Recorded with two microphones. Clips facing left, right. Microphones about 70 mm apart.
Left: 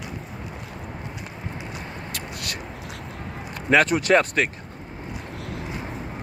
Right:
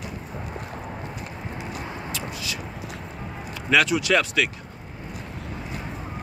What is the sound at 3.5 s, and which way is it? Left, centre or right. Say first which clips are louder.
Speech: left 2 dB; left.